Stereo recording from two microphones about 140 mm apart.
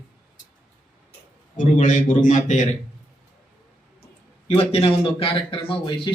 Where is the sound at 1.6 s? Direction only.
65° left (ahead or behind).